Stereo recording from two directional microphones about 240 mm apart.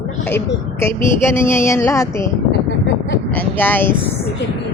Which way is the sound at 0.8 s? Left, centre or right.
Centre.